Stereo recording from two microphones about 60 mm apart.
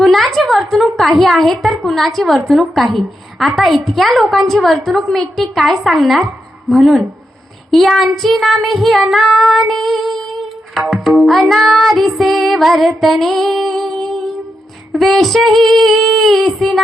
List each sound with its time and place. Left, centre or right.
0.0 s a sound: centre
0.3 s a woman's voice: centre
1.2 s child singing: centre